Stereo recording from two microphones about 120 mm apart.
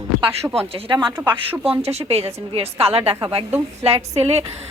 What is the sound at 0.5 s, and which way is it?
Speech, 50° right (ahead or behind).